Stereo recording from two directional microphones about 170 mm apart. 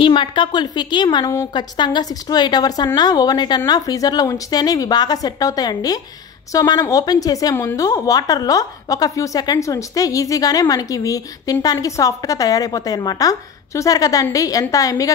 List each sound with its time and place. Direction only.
0.0 s a woman's voice: 30° left (ahead or behind)